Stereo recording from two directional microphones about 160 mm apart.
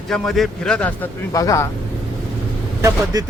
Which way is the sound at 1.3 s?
20° left (ahead or behind).